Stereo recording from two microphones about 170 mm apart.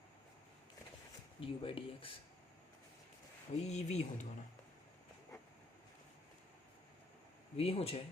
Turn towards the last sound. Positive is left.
turn(degrees=35)  # may be behind; listen again after turning